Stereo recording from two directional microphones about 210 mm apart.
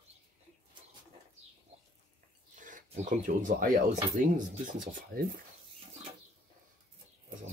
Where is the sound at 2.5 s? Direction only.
35° right (ahead or behind).